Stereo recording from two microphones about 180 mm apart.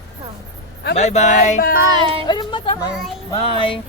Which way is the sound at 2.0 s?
30° right (ahead or behind).